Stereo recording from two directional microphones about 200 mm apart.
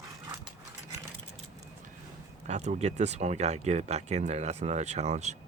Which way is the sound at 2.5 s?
35° right (ahead or behind).